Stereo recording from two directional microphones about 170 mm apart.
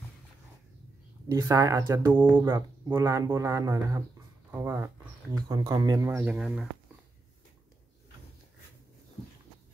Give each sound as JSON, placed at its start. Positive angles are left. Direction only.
{"t": 1.3, "sound": "speech", "side_deg": -20}